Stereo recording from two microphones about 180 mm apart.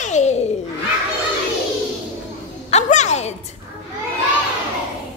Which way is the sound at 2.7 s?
40° left (ahead or behind).